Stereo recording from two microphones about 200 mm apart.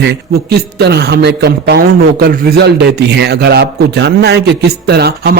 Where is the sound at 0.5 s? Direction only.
55° right (ahead or behind).